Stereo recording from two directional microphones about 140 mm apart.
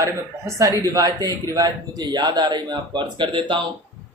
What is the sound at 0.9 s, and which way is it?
Speech, 25° right (ahead or behind).